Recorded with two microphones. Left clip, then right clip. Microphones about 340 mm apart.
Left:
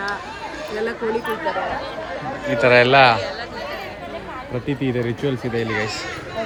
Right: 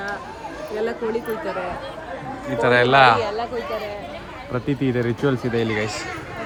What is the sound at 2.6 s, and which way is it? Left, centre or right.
Speech, centre.